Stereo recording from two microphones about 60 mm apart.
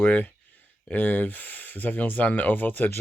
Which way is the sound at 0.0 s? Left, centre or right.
Left.